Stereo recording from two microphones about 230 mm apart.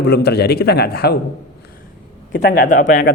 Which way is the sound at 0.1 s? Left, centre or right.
Left.